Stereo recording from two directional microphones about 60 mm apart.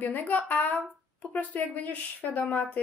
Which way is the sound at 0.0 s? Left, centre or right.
Left.